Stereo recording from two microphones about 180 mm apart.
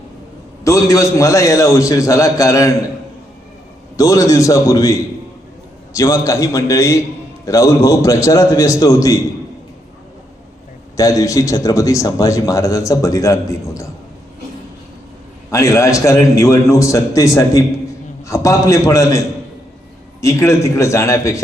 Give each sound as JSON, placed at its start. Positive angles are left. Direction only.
{"t": 0.6, "sound": "a man's voice", "side_deg": 15}
{"t": 3.9, "sound": "a man's voice", "side_deg": 20}
{"t": 10.9, "sound": "a man's voice", "side_deg": 20}
{"t": 15.4, "sound": "a man's voice", "side_deg": 15}
{"t": 20.2, "sound": "a man's voice", "side_deg": 15}